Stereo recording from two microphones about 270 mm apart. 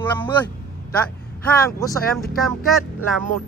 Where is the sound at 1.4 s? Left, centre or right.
Centre.